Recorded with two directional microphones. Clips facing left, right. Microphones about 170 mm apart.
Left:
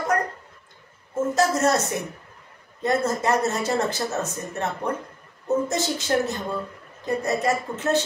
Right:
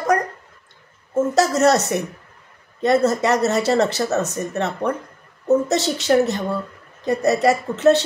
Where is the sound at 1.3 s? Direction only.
75° right (ahead or behind).